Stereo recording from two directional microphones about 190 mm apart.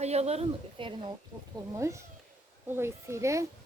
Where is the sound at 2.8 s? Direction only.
15° right (ahead or behind).